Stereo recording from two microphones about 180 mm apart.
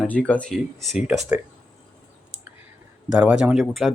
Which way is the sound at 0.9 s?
5° right (ahead or behind).